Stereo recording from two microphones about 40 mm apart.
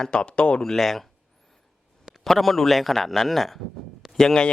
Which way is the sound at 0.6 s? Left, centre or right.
Centre.